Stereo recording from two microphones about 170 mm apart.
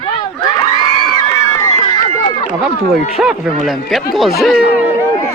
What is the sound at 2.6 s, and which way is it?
Speech, centre (ahead or behind).